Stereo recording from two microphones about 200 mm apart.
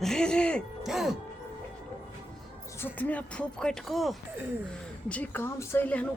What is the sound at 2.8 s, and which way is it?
Speech, 10° left (ahead or behind).